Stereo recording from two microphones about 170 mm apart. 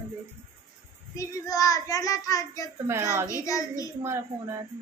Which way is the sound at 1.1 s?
20° left (ahead or behind).